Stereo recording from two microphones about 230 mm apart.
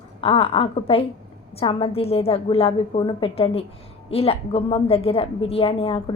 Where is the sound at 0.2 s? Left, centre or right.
Left.